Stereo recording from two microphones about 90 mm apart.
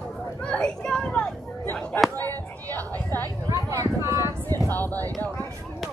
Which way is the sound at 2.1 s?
20° left (ahead or behind).